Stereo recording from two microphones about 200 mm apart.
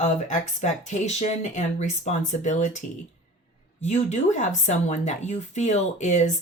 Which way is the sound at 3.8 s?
35° left (ahead or behind).